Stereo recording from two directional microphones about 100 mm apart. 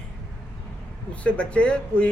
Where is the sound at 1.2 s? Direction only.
10° left (ahead or behind).